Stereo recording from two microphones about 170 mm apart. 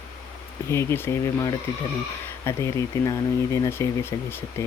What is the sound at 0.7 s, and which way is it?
Speech, 15° left (ahead or behind).